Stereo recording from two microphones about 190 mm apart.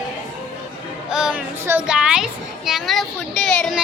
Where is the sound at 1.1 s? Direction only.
5° right (ahead or behind).